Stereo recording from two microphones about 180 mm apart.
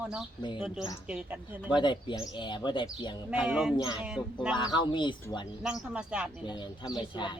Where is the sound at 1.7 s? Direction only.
25° left (ahead or behind).